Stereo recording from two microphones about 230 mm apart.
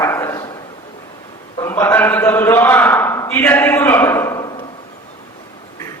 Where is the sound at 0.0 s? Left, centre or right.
Centre.